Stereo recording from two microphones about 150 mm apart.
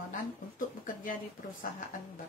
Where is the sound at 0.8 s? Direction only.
65° left (ahead or behind).